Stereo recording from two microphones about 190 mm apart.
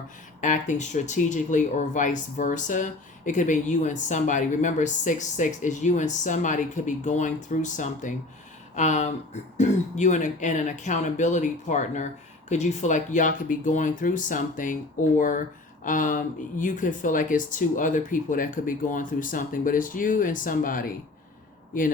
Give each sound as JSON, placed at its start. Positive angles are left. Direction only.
{"t": 0.4, "sound": "speech", "side_deg": 40}